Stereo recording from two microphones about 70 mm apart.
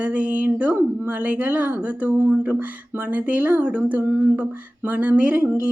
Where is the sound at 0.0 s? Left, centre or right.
Centre.